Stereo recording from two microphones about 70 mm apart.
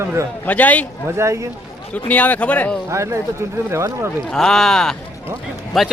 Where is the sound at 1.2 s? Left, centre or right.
Right.